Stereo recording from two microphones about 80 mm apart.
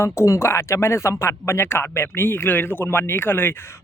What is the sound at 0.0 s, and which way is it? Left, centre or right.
Speech, left.